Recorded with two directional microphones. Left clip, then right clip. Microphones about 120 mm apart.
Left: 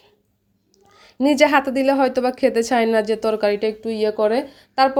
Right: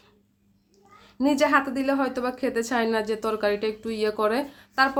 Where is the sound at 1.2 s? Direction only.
55° left (ahead or behind); by 4.9 s 30° left (ahead or behind).